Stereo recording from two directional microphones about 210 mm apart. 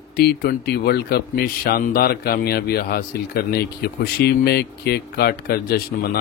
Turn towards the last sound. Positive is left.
turn(degrees=45)  # may be behind; listen again after turning